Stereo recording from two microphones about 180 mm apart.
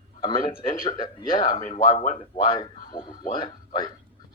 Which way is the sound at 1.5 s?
40° left (ahead or behind).